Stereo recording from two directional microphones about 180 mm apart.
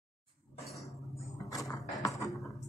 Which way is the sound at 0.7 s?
Centre (ahead or behind).